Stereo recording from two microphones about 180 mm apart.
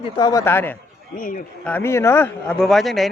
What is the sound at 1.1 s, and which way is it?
Speech, 50° left (ahead or behind).